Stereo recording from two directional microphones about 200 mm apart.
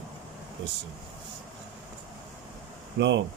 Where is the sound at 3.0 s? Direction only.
60° right (ahead or behind).